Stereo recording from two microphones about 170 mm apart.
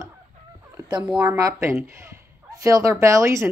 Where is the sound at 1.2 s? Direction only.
20° right (ahead or behind).